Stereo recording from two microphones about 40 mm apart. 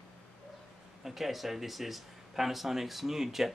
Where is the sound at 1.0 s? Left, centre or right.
Centre.